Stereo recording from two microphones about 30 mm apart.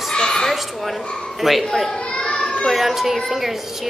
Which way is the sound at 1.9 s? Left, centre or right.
Left.